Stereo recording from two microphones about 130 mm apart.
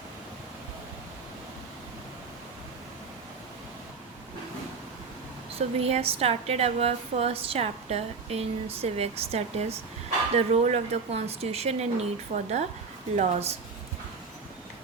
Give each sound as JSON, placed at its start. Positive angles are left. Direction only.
{"t": 5.5, "sound": "a woman's voice", "side_deg": -50}